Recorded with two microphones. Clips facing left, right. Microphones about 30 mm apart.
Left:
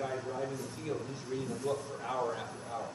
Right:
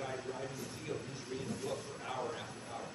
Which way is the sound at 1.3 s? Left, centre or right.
Centre.